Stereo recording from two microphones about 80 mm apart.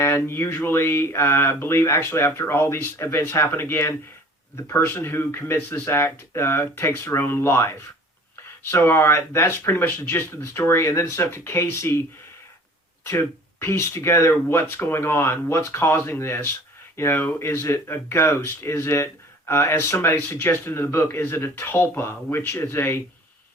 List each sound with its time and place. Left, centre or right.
0.0 s speech: left
13.1 s speech: left